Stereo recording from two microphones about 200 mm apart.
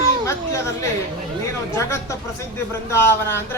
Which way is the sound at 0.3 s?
15° left (ahead or behind).